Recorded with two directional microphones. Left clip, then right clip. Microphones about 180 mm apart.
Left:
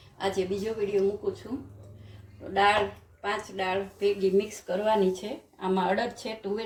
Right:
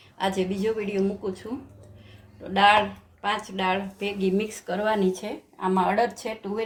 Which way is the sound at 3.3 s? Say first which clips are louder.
Right 3 dB; 50° right (ahead or behind).